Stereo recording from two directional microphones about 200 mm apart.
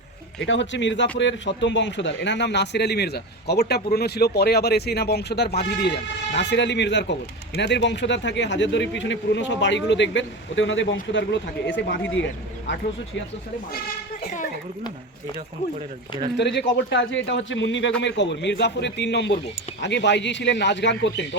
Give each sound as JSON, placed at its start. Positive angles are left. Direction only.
{"t": 0.4, "sound": "a man's voice", "side_deg": 65}
{"t": 11.1, "sound": "a man's voice", "side_deg": 60}
{"t": 16.4, "sound": "a man's voice", "side_deg": 60}